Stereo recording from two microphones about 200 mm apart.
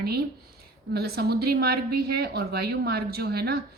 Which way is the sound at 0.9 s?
50° right (ahead or behind).